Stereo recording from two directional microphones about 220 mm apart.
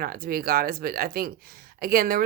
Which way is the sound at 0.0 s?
40° right (ahead or behind).